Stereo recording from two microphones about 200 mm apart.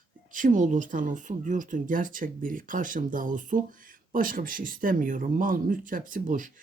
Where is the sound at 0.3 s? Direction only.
40° right (ahead or behind).